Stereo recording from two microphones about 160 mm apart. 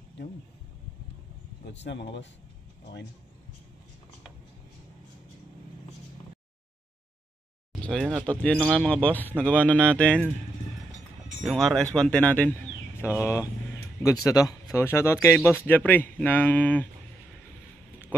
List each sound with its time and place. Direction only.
1.7 s a man's voice: 90° left
7.8 s speech: 5° left (ahead or behind)
11.4 s speech: 5° left (ahead or behind)